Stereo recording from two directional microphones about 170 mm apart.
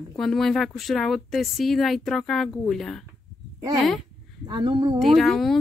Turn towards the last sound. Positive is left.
turn(degrees=0)  # may be behind; listen again after turning